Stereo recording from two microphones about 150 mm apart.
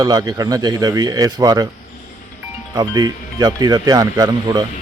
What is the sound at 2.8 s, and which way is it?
A man's voice, 25° right (ahead or behind).